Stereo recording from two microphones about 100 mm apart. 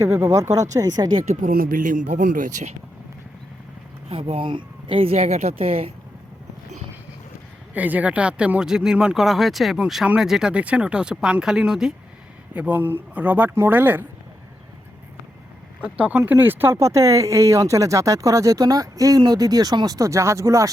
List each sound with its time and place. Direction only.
0.0 s speech: 25° right (ahead or behind)
4.1 s speech: 65° right (ahead or behind)
7.7 s speech: 15° right (ahead or behind)
12.5 s speech: 15° right (ahead or behind)
15.8 s speech: 15° right (ahead or behind); by 20.7 s 30° right (ahead or behind)